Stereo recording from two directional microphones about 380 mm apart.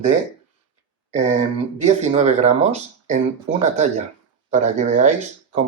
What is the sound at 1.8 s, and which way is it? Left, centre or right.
Speech, centre.